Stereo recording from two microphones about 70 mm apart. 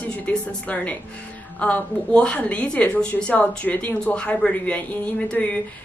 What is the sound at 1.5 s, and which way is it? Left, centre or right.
A woman's voice, centre.